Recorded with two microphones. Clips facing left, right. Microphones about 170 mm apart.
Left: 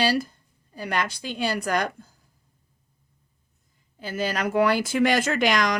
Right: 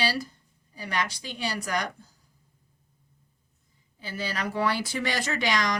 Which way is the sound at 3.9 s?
50° left (ahead or behind).